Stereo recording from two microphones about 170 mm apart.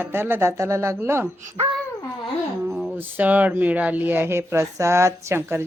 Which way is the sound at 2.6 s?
10° right (ahead or behind).